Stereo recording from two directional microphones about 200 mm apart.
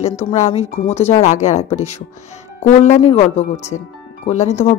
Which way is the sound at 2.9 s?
30° left (ahead or behind).